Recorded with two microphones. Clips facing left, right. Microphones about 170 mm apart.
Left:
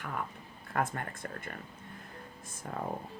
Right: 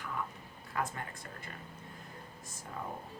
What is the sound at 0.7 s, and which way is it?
Speech, 55° left (ahead or behind).